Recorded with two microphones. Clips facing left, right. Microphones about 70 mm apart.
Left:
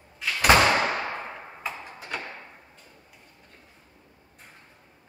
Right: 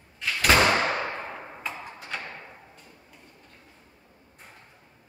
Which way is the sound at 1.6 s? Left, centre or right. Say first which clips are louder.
Left 3 dB; centre.